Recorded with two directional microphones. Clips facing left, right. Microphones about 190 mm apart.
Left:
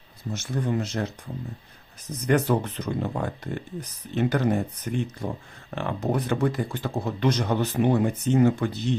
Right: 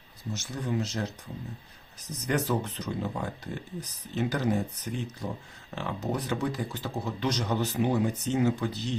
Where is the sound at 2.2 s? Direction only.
55° left (ahead or behind).